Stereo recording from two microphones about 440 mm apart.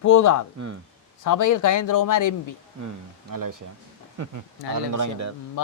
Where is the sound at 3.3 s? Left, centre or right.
Right.